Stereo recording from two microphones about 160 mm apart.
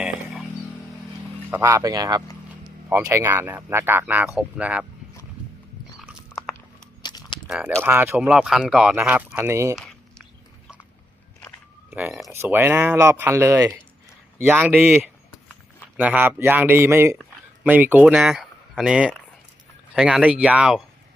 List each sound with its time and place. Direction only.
1.5 s speech: 15° right (ahead or behind)
6.0 s biting: 5° right (ahead or behind)
7.0 s keys jangling: 25° left (ahead or behind)
7.4 s a sound: 5° right (ahead or behind)
7.8 s speech: 15° right (ahead or behind)
9.7 s a sound: 5° left (ahead or behind)
11.9 s speech: 10° right (ahead or behind)
14.7 s a sound: centre (ahead or behind)
16.0 s speech: 10° right (ahead or behind)